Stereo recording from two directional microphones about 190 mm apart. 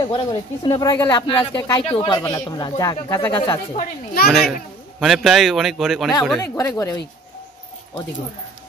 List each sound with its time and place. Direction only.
0.0 s speech: 20° left (ahead or behind)
1.1 s speech: 25° left (ahead or behind)
3.7 s a child's voice: 50° left (ahead or behind)
4.3 s a man's voice: centre (ahead or behind)
6.3 s speech: 10° left (ahead or behind)